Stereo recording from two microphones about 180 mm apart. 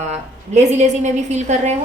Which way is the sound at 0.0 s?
40° right (ahead or behind).